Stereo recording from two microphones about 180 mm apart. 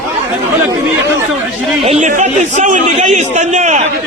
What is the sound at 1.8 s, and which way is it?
A man's voice, 35° right (ahead or behind).